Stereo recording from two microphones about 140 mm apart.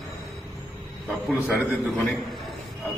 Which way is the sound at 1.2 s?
Centre (ahead or behind).